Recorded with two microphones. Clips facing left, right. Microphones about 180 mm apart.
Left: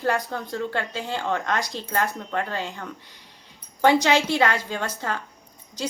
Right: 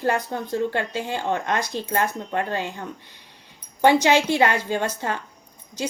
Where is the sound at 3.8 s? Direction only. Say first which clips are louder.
Right 2 dB; 20° right (ahead or behind).